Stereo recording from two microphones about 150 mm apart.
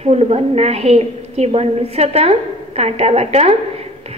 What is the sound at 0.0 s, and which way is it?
A woman's voice, 45° right (ahead or behind).